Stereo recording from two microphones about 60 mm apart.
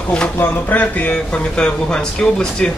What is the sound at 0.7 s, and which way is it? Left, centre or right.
Speech, left.